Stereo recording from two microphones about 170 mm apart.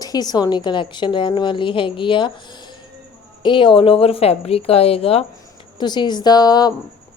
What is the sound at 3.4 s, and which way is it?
A woman's voice, 30° left (ahead or behind).